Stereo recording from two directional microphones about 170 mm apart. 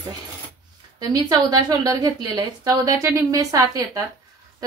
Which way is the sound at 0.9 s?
25° right (ahead or behind).